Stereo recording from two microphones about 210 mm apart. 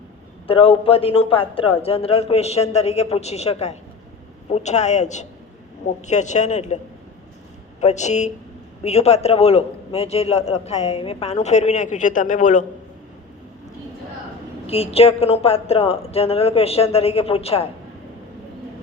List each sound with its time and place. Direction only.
0.4 s a man's voice: 25° left (ahead or behind)
7.8 s a man's voice: 30° left (ahead or behind)
14.7 s a man's voice: 30° left (ahead or behind)